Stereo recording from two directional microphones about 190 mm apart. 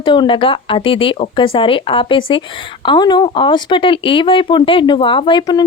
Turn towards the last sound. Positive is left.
turn(degrees=25)  # may be behind; listen again after turning